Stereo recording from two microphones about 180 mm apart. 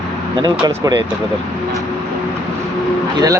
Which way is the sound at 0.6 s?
20° right (ahead or behind).